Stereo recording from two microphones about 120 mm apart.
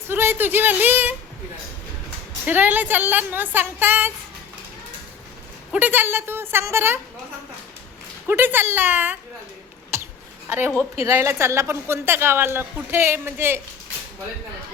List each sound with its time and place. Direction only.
0.1 s a woman's voice: 20° right (ahead or behind)
2.5 s a woman's voice: 15° right (ahead or behind)
5.7 s a woman's voice: 15° right (ahead or behind)
8.3 s a woman's voice: 15° right (ahead or behind)
9.9 s a sound: 20° right (ahead or behind)
11.0 s a woman's voice: 25° right (ahead or behind)